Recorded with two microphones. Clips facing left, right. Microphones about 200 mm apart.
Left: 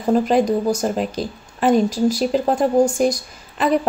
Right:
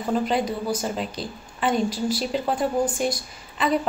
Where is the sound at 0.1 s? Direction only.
45° left (ahead or behind).